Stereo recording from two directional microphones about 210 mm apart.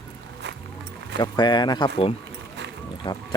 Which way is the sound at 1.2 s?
20° left (ahead or behind).